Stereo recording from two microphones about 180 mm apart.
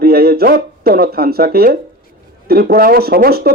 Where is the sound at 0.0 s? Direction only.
60° right (ahead or behind).